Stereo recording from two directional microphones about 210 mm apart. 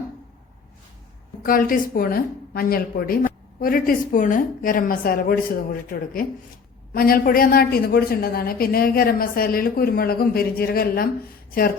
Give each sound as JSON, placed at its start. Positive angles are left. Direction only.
{"t": 1.5, "sound": "speech", "side_deg": 40}